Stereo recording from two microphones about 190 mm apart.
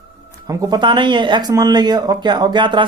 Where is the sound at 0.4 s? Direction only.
20° right (ahead or behind).